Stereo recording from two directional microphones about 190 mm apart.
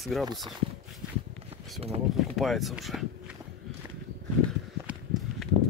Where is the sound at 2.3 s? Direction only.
Centre (ahead or behind).